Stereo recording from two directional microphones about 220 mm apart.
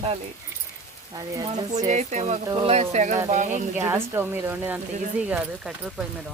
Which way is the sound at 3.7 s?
10° right (ahead or behind).